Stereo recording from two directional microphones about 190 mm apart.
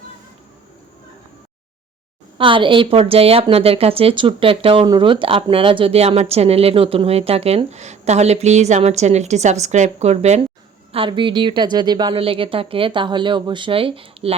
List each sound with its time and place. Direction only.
2.4 s a woman's voice: 25° right (ahead or behind)